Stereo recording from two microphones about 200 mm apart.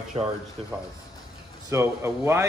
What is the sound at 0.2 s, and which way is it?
Speech, 25° right (ahead or behind).